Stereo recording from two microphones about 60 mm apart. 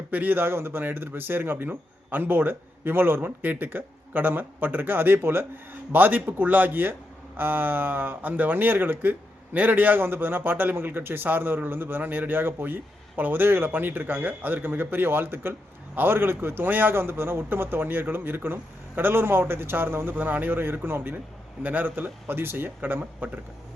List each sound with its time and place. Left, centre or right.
0.1 s speech: right